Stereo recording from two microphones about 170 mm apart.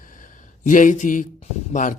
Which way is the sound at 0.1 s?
50° left (ahead or behind).